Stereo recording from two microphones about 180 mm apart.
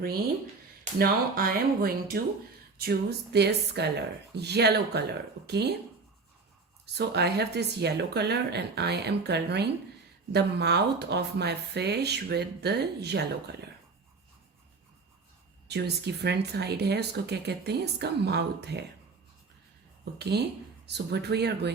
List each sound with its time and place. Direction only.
0.9 s speech: 55° right (ahead or behind)
6.8 s speech: 65° right (ahead or behind)
15.6 s speech: 65° right (ahead or behind)
20.1 s speech: 65° right (ahead or behind)